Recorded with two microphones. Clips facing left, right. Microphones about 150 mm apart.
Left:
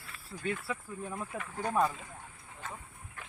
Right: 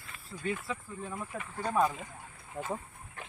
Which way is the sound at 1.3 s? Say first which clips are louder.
Even; 10° left (ahead or behind).